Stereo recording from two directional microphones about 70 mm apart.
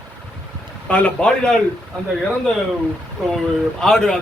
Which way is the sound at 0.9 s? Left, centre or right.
Centre.